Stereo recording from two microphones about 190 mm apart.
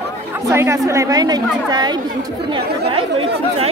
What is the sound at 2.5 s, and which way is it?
Chatter, 30° right (ahead or behind).